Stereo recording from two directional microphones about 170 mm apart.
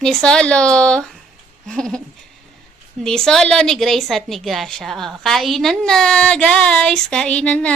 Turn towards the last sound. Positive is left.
turn(degrees=5)  # may be behind; listen again after turning